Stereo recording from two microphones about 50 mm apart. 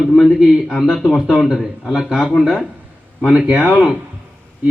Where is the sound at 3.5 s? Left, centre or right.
Right.